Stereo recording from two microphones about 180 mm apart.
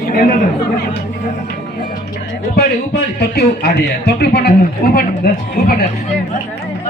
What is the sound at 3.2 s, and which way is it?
A man's voice, 60° left (ahead or behind).